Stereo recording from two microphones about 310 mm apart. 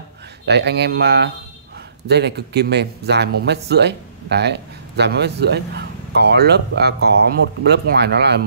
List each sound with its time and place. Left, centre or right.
0.5 s speech: right